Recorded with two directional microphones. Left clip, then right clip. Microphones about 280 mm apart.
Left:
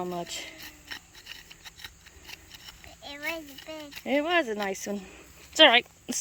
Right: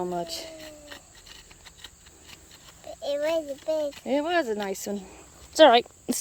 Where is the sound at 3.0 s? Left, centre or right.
Right.